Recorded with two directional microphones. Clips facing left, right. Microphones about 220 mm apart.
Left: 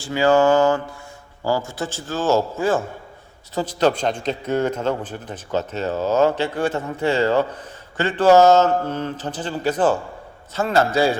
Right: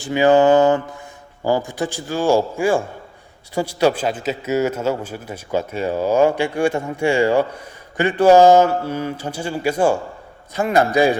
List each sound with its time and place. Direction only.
0.0 s mantra: 20° right (ahead or behind)
1.5 s a man's voice: 15° right (ahead or behind)